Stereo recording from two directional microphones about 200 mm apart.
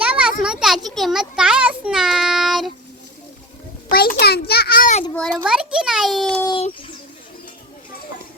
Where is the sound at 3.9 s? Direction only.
50° left (ahead or behind).